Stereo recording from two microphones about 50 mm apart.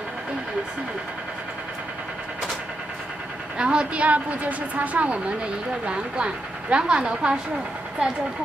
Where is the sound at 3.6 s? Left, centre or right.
Centre.